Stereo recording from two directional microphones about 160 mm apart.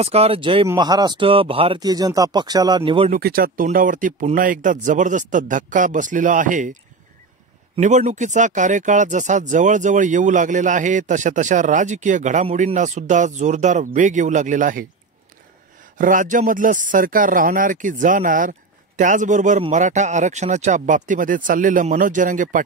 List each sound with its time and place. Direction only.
0.0 s speech: 40° right (ahead or behind)
1.8 s speech: 25° right (ahead or behind)
3.1 s speech: 70° right (ahead or behind); by 6.8 s 55° right (ahead or behind)
7.8 s speech: 50° right (ahead or behind)
16.0 s speech: 55° right (ahead or behind)